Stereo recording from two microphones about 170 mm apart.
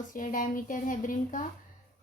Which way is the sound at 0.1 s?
50° left (ahead or behind).